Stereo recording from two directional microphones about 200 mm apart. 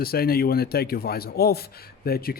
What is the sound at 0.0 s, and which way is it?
Speech, 50° left (ahead or behind).